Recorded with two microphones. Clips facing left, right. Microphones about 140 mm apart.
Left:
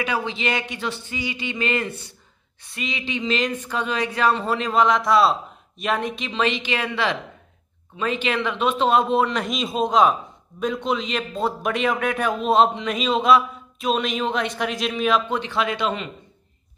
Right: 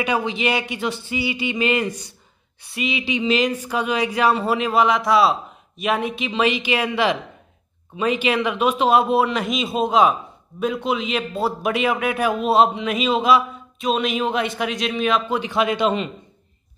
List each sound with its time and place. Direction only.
0.0 s a man's voice: 15° right (ahead or behind)
15.5 s a man's voice: 20° right (ahead or behind)